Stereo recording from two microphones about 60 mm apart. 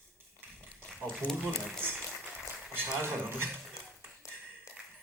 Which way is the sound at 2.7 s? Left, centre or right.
Right.